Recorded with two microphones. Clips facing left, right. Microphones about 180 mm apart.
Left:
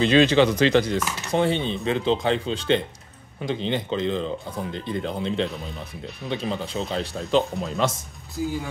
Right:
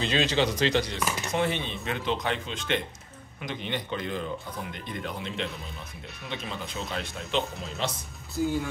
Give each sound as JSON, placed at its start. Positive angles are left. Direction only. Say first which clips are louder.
{"t": 0.0, "sound": "speech", "louder": "left 9 dB", "side_deg": 60}
{"t": 1.3, "sound": "speech", "louder": "left 8 dB", "side_deg": 30}
{"t": 8.4, "sound": "speech", "louder": "even", "side_deg": 10}